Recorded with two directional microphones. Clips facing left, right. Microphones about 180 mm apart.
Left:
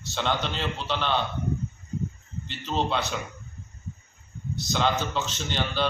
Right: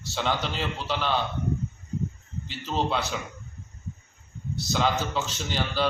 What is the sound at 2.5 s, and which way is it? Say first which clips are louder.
Speech: even; 5° right (ahead or behind).